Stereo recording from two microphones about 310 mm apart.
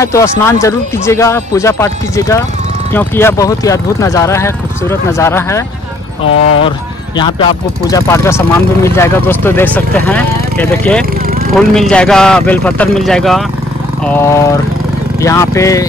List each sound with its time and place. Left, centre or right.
0.0 s speech: centre
7.2 s speech: centre